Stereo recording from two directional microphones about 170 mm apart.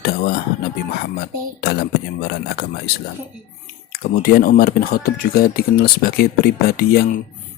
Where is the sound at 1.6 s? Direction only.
70° left (ahead or behind).